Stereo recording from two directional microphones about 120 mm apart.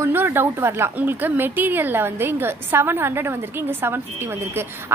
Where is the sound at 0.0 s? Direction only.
20° right (ahead or behind).